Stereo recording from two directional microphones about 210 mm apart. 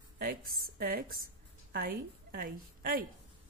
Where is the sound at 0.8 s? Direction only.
45° right (ahead or behind).